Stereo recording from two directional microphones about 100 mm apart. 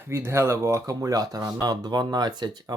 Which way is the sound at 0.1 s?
25° right (ahead or behind).